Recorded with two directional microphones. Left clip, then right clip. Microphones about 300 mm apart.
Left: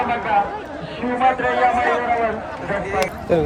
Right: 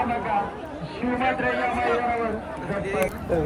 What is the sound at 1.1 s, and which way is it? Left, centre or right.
Speech, left.